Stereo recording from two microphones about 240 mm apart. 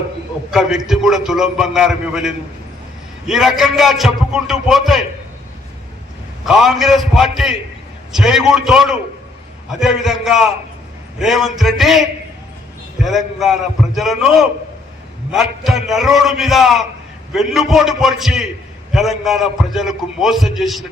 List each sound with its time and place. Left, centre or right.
0.5 s a man's voice: centre
6.4 s a man's voice: centre